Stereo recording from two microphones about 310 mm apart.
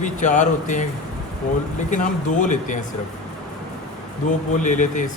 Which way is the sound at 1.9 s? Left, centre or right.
Left.